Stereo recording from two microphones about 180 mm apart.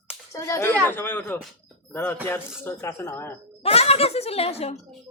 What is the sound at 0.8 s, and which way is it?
A man's voice, 10° left (ahead or behind).